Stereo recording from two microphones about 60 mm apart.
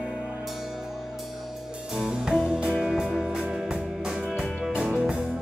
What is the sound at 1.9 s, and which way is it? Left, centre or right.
Music, centre.